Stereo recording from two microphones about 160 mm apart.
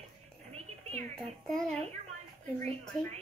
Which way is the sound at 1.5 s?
5° left (ahead or behind).